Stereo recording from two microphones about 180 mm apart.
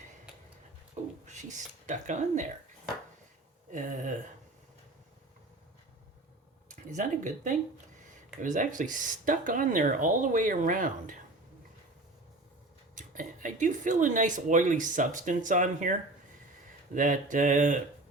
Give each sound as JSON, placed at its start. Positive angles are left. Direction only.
{"t": 1.0, "sound": "a sound", "side_deg": -40}
{"t": 1.3, "sound": "speech", "side_deg": -40}
{"t": 3.7, "sound": "speech", "side_deg": -45}
{"t": 6.7, "sound": "speech", "side_deg": -45}
{"t": 13.0, "sound": "speech", "side_deg": -45}